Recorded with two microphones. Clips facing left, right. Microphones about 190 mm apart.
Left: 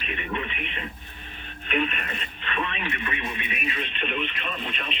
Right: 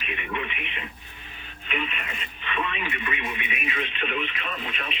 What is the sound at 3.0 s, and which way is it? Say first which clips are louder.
Radio: even; 15° right (ahead or behind).